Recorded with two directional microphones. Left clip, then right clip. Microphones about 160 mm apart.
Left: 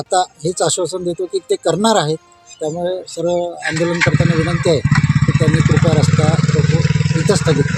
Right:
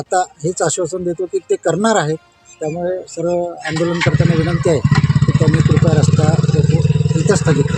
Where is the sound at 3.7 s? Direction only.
35° right (ahead or behind).